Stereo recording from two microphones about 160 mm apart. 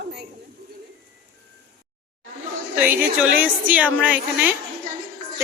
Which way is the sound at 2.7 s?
10° right (ahead or behind).